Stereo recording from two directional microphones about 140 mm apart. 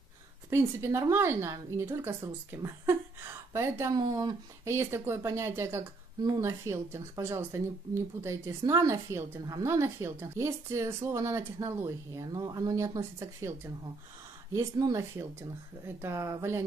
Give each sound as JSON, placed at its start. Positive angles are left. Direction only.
{"t": 0.5, "sound": "a woman's voice", "side_deg": -20}
{"t": 4.0, "sound": "speech", "side_deg": -30}
{"t": 4.6, "sound": "a woman's voice", "side_deg": -20}
{"t": 14.5, "sound": "a woman's voice", "side_deg": -25}